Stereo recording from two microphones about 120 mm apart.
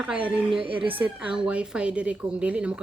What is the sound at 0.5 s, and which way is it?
Speech, 45° right (ahead or behind).